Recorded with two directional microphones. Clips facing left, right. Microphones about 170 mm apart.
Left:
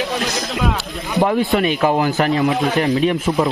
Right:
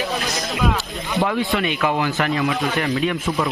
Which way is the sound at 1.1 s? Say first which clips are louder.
Left 5 dB; 40° left (ahead or behind).